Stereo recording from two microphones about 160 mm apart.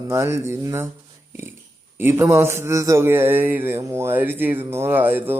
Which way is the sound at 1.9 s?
15° right (ahead or behind).